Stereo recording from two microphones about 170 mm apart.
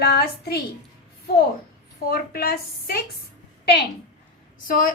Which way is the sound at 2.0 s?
60° left (ahead or behind).